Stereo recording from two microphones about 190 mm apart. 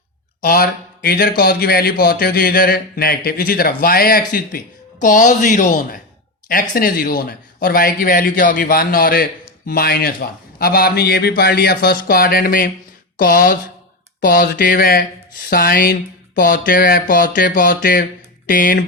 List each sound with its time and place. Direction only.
0.4 s speech: 50° left (ahead or behind)